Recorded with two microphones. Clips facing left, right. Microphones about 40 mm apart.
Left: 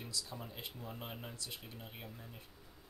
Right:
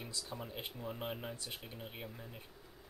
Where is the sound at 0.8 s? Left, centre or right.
Centre.